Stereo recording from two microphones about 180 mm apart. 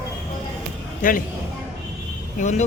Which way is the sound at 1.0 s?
50° left (ahead or behind).